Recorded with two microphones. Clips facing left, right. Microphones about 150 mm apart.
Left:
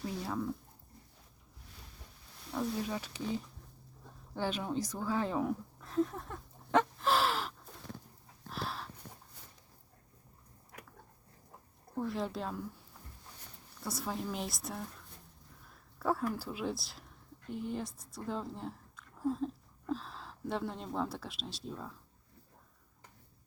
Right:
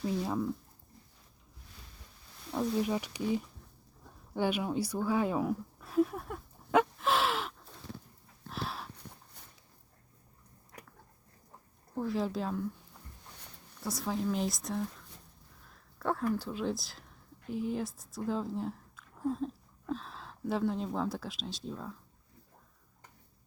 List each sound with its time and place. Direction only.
0.0 s speech: 20° right (ahead or behind)
2.5 s speech: 20° right (ahead or behind)
4.4 s a sound: 10° right (ahead or behind)
11.9 s speech: centre (ahead or behind)
13.8 s speech: centre (ahead or behind)
16.0 s speech: 5° left (ahead or behind)